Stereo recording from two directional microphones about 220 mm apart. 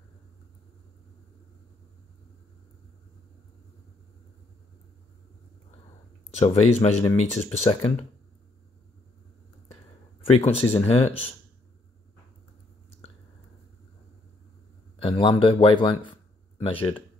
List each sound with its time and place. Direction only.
6.3 s a man's voice: 30° left (ahead or behind)
10.2 s a man's voice: 25° left (ahead or behind)
15.0 s a man's voice: 25° left (ahead or behind)